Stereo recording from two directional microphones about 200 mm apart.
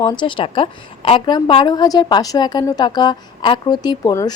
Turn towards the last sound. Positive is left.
turn(degrees=20)  # may be behind; listen again after turning